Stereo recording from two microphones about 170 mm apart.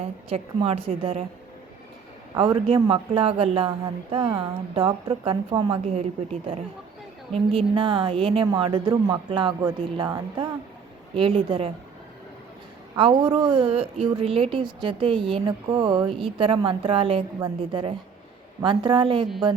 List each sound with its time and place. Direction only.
0.0 s a woman's voice: 35° right (ahead or behind)
2.3 s a woman's voice: 25° right (ahead or behind)
5.8 s a woman's voice: 40° right (ahead or behind)
7.3 s a woman's voice: 30° right (ahead or behind)
13.0 s a woman's voice: 30° right (ahead or behind)